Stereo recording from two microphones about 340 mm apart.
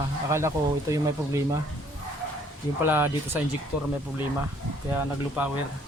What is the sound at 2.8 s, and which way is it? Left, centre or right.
Speech, centre.